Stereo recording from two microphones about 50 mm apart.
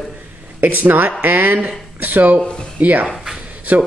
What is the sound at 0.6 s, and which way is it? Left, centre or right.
Speech, right.